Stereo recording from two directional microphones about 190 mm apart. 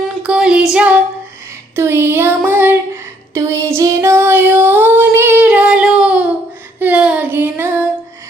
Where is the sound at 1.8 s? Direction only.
10° right (ahead or behind).